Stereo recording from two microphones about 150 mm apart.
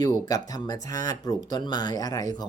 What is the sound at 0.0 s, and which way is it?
Speech, 25° left (ahead or behind).